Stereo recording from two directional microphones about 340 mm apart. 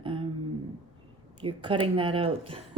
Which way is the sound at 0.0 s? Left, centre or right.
Centre.